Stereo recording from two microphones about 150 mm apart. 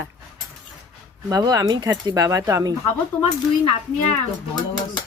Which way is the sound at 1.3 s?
25° right (ahead or behind).